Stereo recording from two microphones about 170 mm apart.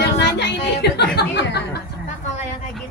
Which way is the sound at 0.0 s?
90° left.